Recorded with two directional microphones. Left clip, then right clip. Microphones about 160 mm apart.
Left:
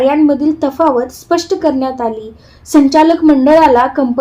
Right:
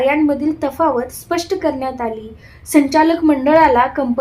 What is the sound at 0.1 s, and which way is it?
A woman's voice, 30° left (ahead or behind).